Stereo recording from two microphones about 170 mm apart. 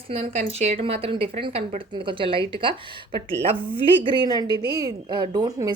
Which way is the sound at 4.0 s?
25° right (ahead or behind).